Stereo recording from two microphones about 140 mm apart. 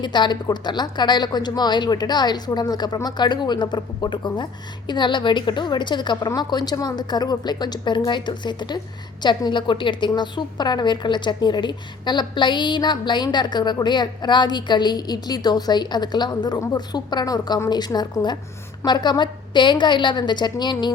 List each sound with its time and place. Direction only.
0.0 s a woman's voice: 30° left (ahead or behind)